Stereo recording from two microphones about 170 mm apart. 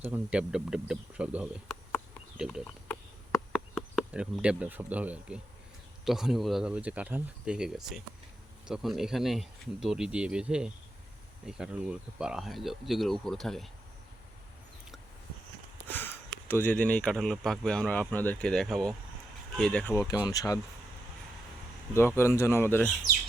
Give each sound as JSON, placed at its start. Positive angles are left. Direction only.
{"t": 0.0, "sound": "speech", "side_deg": -10}
{"t": 3.5, "sound": "speech", "side_deg": 0}
{"t": 15.9, "sound": "speech", "side_deg": 10}
{"t": 20.1, "sound": "speech", "side_deg": 20}
{"t": 21.9, "sound": "speech", "side_deg": 15}